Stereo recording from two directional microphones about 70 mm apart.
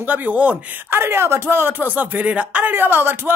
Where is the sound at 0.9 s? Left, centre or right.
Right.